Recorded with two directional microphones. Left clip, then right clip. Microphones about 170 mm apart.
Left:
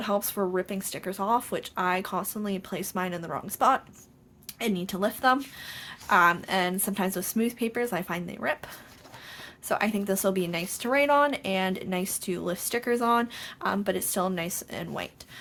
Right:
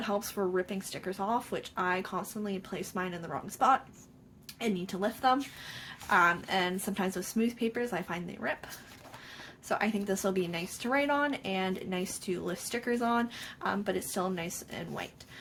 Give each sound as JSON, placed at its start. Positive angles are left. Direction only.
{"t": 0.0, "sound": "speech", "side_deg": 45}
{"t": 9.6, "sound": "a woman's voice", "side_deg": 40}